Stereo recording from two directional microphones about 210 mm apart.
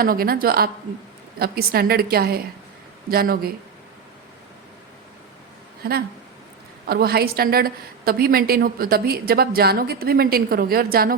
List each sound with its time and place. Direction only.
0.0 s a woman's voice: 45° right (ahead or behind)
5.8 s a woman's voice: 45° right (ahead or behind)